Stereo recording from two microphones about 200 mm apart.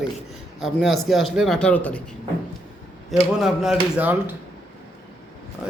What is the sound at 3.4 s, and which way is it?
Speech, centre (ahead or behind).